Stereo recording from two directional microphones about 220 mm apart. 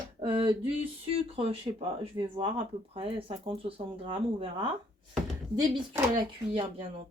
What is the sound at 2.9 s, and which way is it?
Speech, 25° right (ahead or behind).